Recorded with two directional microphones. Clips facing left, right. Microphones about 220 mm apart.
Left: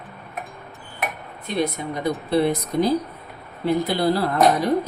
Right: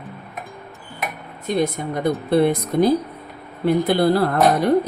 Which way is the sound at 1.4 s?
45° right (ahead or behind).